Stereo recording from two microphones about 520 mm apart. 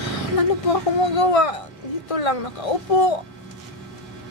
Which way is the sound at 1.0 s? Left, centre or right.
Left.